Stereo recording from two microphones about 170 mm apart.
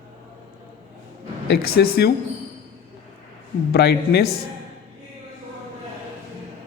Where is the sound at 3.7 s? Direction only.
70° left (ahead or behind).